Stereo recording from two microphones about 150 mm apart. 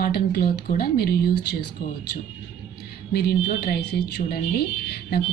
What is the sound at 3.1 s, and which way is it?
Speech, 90° left.